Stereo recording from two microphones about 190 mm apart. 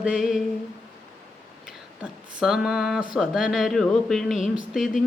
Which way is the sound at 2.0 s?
5° right (ahead or behind).